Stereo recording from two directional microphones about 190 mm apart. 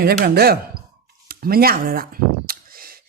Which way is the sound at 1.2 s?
50° right (ahead or behind).